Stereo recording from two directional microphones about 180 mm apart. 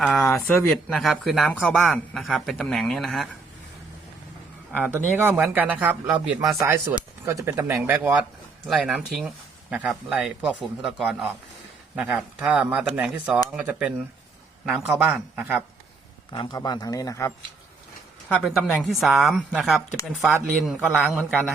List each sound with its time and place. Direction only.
0.0 s a man's voice: centre (ahead or behind)
4.7 s a man's voice: 10° right (ahead or behind)
16.3 s speech: 20° left (ahead or behind)
18.8 s a man's voice: centre (ahead or behind)